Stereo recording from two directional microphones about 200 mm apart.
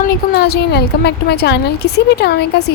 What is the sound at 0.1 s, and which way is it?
A woman's voice, 50° left (ahead or behind).